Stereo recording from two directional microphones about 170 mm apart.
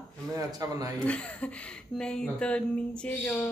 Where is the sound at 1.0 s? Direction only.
5° left (ahead or behind).